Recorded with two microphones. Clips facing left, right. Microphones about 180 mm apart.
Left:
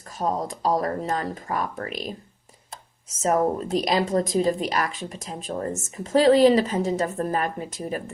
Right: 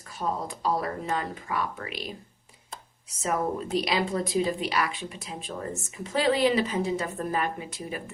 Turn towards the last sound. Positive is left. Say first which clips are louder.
# left 4 dB
turn(degrees=45)  # may be behind; listen again after turning